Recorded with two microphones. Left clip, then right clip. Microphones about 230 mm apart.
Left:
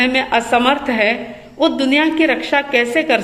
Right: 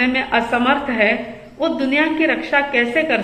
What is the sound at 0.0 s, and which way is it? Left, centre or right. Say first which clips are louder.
A woman's voice: left 2 dB; left.